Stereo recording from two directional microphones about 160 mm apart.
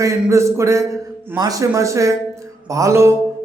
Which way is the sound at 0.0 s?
15° right (ahead or behind).